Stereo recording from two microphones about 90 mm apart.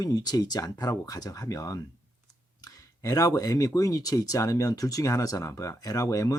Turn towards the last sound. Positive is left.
turn(degrees=40)  # may be behind; listen again after turning